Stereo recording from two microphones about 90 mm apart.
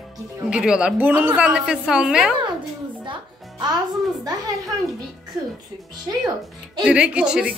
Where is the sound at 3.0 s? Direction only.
60° right (ahead or behind).